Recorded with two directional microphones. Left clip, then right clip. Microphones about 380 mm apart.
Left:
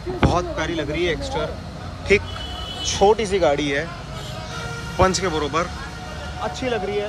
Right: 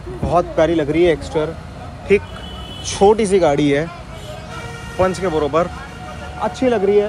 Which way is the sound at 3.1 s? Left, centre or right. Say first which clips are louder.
Right 4 dB; centre.